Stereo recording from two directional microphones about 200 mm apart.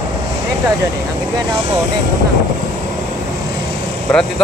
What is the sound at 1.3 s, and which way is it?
Speech, 25° right (ahead or behind).